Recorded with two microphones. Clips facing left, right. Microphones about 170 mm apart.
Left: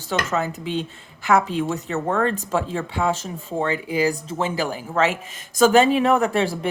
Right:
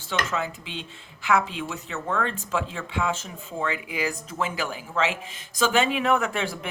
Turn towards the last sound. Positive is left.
turn(degrees=35)  # may be behind; listen again after turning